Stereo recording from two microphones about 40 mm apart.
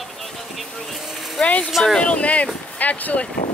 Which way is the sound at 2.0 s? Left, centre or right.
Left.